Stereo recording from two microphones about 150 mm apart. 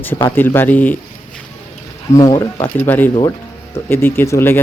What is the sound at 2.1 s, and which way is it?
Speech, 25° left (ahead or behind).